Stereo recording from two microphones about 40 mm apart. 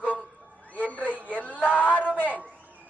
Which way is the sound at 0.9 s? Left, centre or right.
Left.